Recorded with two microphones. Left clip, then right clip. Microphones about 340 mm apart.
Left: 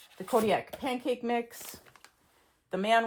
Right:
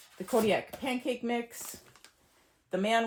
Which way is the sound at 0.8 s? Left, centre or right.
Centre.